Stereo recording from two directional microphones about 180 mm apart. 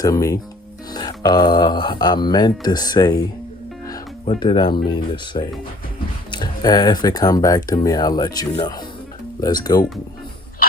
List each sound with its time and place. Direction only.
0.0 s speech: 20° left (ahead or behind)
4.4 s speech: 25° left (ahead or behind)